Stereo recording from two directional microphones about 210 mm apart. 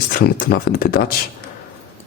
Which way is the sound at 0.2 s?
45° left (ahead or behind).